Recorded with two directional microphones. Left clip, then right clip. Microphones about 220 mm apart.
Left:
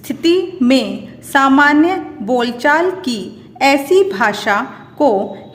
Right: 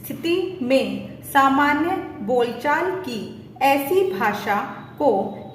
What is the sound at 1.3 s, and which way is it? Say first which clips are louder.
A woman's voice: left 6 dB; 50° left (ahead or behind).